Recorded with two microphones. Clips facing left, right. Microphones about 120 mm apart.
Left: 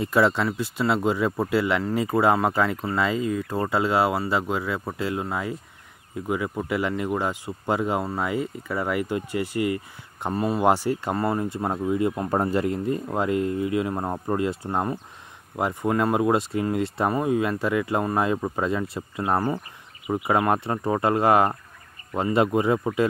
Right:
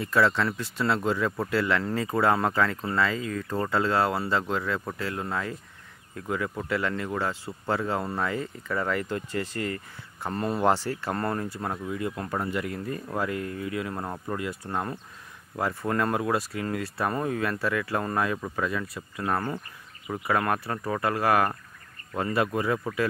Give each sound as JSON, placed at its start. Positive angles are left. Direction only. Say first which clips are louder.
{"t": 0.0, "sound": "speech", "louder": "left 3 dB", "side_deg": 15}